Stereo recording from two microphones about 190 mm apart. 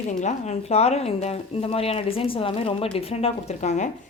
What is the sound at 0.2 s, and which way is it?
Speech, 35° left (ahead or behind).